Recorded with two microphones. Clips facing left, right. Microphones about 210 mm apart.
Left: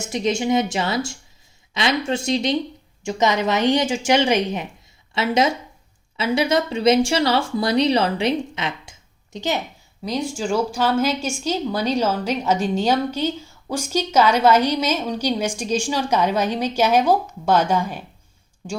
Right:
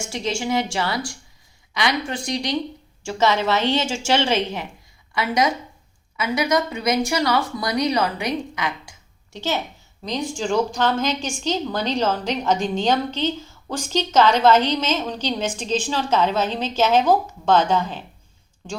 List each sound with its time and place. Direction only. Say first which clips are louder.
0.0 s a woman's voice: left 4 dB; 20° left (ahead or behind)